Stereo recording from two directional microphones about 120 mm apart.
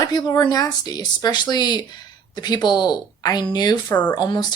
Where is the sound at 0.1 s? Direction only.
35° left (ahead or behind).